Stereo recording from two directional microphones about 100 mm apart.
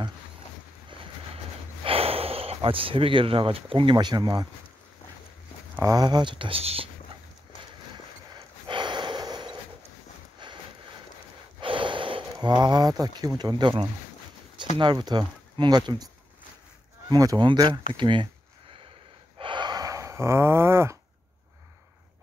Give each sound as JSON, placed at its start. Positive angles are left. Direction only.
{"t": 1.3, "sound": "speech", "side_deg": -70}
{"t": 5.9, "sound": "speech", "side_deg": -45}
{"t": 8.6, "sound": "snort", "side_deg": -50}
{"t": 10.4, "sound": "a sound", "side_deg": -50}
{"t": 11.6, "sound": "a sound", "side_deg": -55}
{"t": 13.4, "sound": "speech", "side_deg": -45}
{"t": 17.1, "sound": "speech", "side_deg": -35}
{"t": 19.3, "sound": "gasp", "side_deg": -55}